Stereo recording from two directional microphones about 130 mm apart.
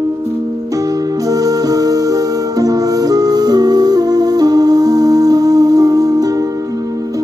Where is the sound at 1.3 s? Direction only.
30° right (ahead or behind).